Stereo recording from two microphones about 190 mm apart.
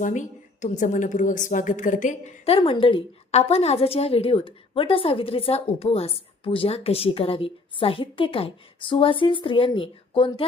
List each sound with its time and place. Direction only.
0.0 s a woman's voice: 40° left (ahead or behind)